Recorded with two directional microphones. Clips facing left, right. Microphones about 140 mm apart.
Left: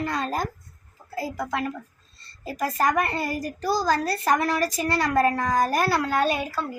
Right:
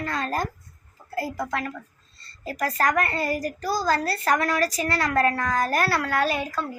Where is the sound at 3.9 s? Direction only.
15° left (ahead or behind).